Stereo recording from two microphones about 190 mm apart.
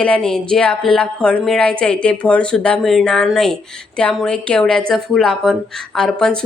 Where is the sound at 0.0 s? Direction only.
5° left (ahead or behind).